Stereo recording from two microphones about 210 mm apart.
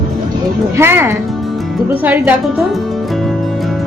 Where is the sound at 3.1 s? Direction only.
Centre (ahead or behind).